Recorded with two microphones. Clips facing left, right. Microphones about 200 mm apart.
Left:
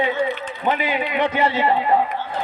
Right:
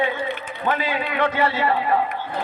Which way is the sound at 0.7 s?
20° left (ahead or behind).